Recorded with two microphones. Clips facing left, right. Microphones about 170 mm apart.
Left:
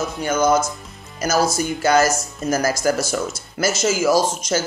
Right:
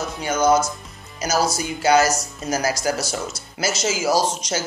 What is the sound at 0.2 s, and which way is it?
Speech, 50° left (ahead or behind).